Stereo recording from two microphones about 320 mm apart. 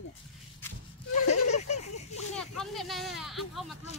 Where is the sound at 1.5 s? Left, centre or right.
Left.